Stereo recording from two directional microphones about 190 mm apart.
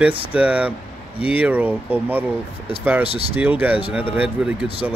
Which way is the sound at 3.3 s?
10° right (ahead or behind).